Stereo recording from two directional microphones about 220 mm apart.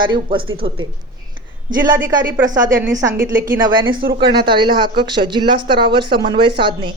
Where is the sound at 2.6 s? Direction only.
15° right (ahead or behind).